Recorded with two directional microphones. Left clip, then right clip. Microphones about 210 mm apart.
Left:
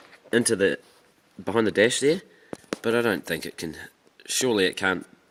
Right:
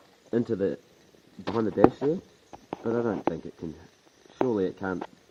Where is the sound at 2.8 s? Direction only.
35° left (ahead or behind).